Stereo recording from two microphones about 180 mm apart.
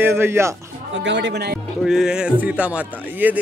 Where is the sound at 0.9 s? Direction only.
85° right; by 1.6 s 65° right (ahead or behind).